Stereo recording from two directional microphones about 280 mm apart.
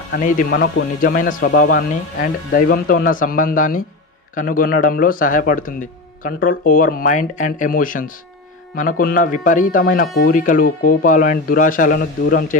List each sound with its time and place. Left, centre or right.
0.1 s a man's voice: left